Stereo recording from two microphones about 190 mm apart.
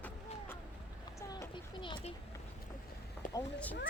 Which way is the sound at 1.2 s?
20° left (ahead or behind).